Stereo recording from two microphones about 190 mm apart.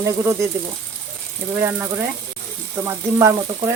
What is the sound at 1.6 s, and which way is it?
Speech, 10° right (ahead or behind).